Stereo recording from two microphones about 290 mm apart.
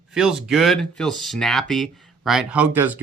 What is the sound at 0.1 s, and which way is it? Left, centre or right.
Speech, centre.